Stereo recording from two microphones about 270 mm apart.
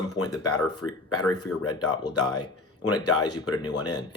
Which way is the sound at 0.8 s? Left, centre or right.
Left.